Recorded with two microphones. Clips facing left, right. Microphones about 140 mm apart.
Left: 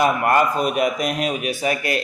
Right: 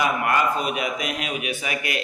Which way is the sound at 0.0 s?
40° left (ahead or behind).